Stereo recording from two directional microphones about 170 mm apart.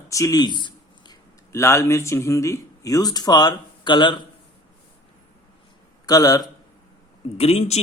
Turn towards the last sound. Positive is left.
turn(degrees=40)  # may be behind; listen again after turning